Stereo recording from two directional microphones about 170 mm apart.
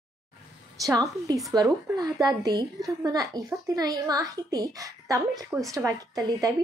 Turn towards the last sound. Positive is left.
turn(degrees=-20)  # may be behind; listen again after turning